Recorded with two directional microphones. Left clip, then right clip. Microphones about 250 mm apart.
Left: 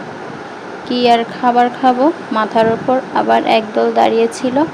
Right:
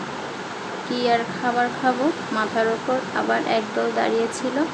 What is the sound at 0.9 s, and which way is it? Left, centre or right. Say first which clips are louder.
Speech: left 9 dB; left.